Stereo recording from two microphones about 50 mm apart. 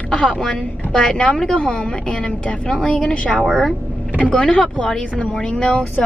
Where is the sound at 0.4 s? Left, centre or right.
Centre.